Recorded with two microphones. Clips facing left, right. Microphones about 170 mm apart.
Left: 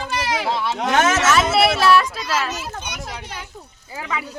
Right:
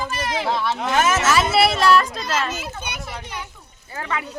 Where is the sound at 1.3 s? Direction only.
Centre (ahead or behind).